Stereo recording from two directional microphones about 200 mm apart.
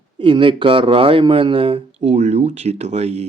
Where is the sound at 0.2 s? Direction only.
25° right (ahead or behind).